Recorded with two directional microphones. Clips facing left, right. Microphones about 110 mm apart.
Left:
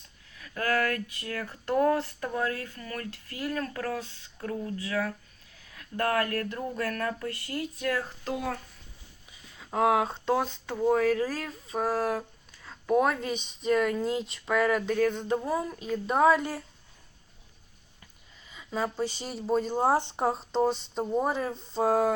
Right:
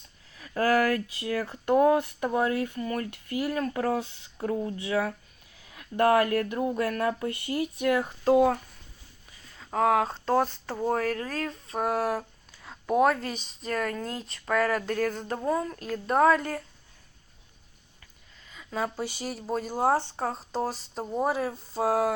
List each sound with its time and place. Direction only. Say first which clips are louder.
0.3 s speech: right 5 dB; 30° right (ahead or behind)
8.2 s speech: right 11 dB; 30° right (ahead or behind)
9.7 s a woman's voice: right 1 dB; 15° left (ahead or behind)
10.1 s speech: right 2 dB; 5° left (ahead or behind)
11.8 s speech: right 1 dB; 10° right (ahead or behind)
15.4 s a woman's voice: right 2 dB; 10° left (ahead or behind)
18.5 s a sound: even; centre (ahead or behind)
19.0 s speech: left 2 dB; 5° right (ahead or behind)
19.9 s a woman's voice: even; 15° left (ahead or behind)
20.3 s speech: left 4 dB; centre (ahead or behind)